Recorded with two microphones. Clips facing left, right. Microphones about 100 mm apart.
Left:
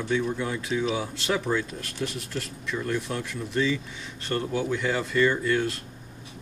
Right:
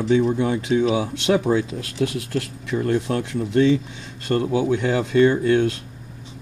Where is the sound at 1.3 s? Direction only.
45° right (ahead or behind).